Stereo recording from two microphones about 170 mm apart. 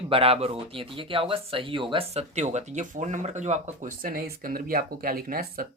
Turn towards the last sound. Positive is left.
turn(degrees=-60)  # may be behind; listen again after turning